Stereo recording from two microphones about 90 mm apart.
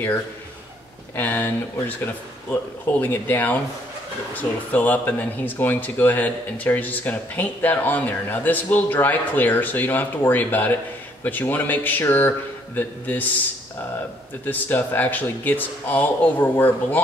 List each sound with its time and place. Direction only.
1.1 s speech: 20° left (ahead or behind)
14.4 s speech: 20° left (ahead or behind)